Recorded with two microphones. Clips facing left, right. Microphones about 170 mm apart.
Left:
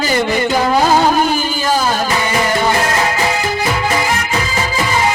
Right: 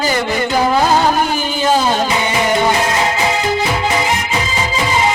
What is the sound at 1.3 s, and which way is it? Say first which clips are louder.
Music: right 1 dB; 20° right (ahead or behind).